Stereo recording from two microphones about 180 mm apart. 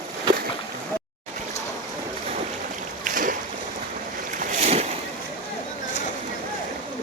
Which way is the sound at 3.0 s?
50° right (ahead or behind).